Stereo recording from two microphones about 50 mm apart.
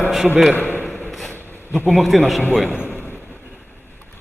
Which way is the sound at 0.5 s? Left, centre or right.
Left.